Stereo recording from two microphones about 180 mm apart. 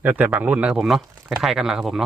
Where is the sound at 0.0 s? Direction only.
10° right (ahead or behind).